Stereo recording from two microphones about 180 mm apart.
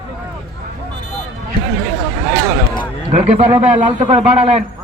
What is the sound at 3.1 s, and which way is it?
A man's voice, 40° right (ahead or behind).